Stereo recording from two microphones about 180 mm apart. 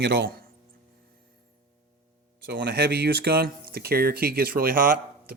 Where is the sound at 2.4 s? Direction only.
80° right; by 5.3 s 55° right (ahead or behind).